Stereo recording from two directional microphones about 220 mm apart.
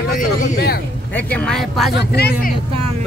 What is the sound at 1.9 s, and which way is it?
Speech, 50° left (ahead or behind).